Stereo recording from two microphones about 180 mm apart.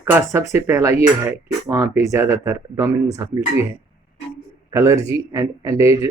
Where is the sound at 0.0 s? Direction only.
15° right (ahead or behind).